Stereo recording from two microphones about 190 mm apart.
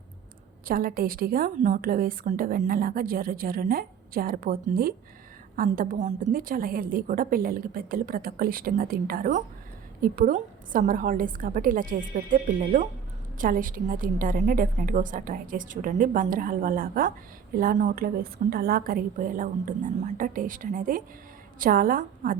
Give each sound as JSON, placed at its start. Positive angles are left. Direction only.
{"t": 0.7, "sound": "a woman's voice", "side_deg": -50}